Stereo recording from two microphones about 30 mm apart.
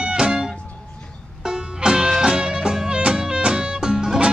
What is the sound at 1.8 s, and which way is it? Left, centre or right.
Music, right.